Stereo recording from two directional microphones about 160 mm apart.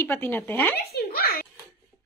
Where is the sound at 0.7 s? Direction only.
75° left (ahead or behind).